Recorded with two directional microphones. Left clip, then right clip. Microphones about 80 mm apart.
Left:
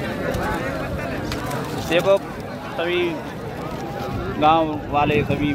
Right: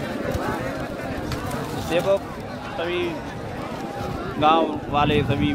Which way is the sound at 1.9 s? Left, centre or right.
Centre.